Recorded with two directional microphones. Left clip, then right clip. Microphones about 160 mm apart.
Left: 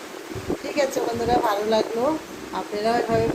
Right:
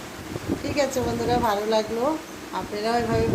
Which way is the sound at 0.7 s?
15° right (ahead or behind).